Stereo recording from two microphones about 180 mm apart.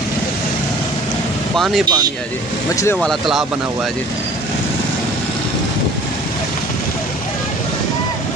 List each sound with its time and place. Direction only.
1.6 s speech: centre (ahead or behind)
2.7 s speech: 15° left (ahead or behind)
3.0 s speech: centre (ahead or behind)